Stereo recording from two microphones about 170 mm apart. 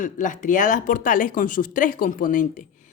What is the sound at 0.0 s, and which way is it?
A woman's voice, 50° left (ahead or behind).